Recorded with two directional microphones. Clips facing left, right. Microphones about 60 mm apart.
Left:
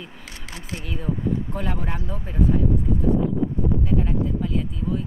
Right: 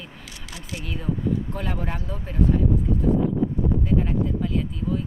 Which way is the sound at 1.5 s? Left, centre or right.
Centre.